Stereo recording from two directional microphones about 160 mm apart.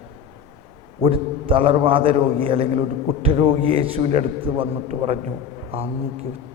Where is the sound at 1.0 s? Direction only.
35° right (ahead or behind).